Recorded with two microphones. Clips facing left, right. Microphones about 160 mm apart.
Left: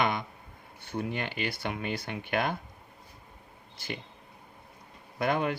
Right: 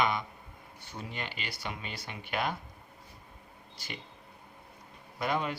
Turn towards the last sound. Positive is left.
turn(degrees=55)  # may be behind; listen again after turning